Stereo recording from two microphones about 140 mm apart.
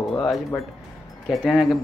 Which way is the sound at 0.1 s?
5° left (ahead or behind).